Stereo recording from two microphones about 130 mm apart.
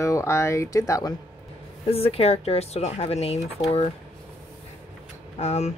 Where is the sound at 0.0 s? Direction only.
25° left (ahead or behind).